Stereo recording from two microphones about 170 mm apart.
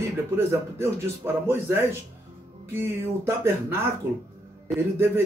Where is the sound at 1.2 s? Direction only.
15° right (ahead or behind).